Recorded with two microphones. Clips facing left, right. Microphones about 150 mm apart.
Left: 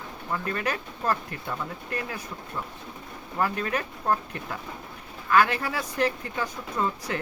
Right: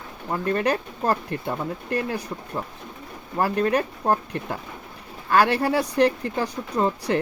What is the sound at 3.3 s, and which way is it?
Speech, 35° right (ahead or behind).